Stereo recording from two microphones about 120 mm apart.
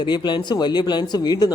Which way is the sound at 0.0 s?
40° left (ahead or behind).